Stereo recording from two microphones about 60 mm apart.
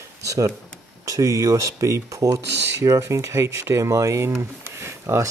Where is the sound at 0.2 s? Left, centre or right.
Right.